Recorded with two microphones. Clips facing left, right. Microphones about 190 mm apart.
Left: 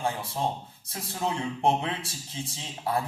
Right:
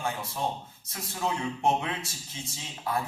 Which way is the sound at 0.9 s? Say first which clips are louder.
Left 1 dB; 30° left (ahead or behind).